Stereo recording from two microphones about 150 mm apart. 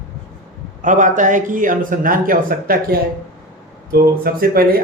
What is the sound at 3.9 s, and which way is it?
Speech, 90° right.